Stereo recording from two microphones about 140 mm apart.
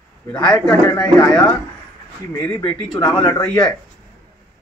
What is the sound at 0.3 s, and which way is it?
Speech, 5° left (ahead or behind).